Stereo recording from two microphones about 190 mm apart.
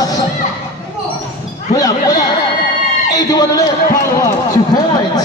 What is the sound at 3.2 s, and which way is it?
Speech, 20° left (ahead or behind).